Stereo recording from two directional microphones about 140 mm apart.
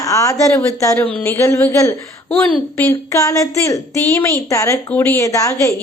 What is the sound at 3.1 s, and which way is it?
A woman's voice, 25° left (ahead or behind).